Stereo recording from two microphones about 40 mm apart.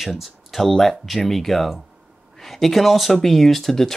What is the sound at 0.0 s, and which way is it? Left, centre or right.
Speech, centre.